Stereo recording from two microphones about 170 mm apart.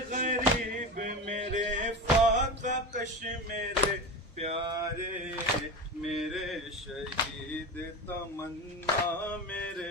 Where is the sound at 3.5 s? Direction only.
45° right (ahead or behind).